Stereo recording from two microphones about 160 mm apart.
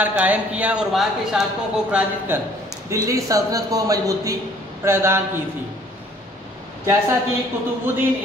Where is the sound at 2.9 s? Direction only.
20° right (ahead or behind).